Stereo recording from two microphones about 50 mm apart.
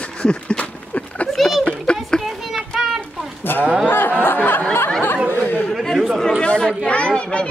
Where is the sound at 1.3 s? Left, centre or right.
Centre.